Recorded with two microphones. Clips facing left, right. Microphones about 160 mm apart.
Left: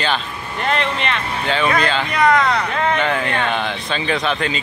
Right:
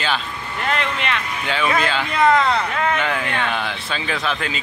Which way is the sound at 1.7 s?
5° right (ahead or behind).